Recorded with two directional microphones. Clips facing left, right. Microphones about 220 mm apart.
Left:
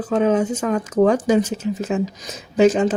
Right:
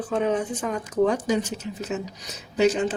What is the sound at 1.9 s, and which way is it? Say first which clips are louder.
Speech: left 7 dB; 90° left.